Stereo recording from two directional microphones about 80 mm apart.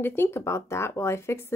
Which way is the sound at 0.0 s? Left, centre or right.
Left.